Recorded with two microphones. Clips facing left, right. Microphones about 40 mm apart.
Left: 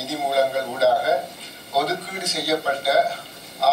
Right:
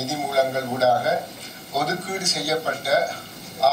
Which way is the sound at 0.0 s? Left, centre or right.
Left.